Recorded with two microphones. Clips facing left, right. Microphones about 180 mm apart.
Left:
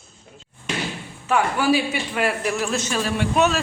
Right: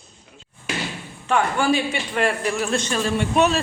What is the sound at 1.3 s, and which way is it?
A man's voice, 5° left (ahead or behind).